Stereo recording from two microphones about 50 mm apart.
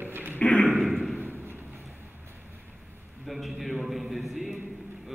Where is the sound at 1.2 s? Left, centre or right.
Right.